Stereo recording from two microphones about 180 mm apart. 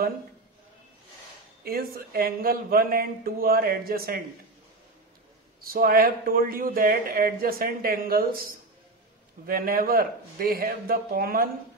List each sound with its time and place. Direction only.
1.6 s speech: 55° right (ahead or behind)
5.6 s a man's voice: 55° right (ahead or behind)